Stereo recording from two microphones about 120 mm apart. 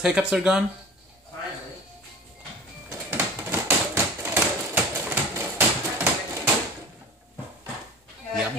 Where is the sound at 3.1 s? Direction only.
20° right (ahead or behind).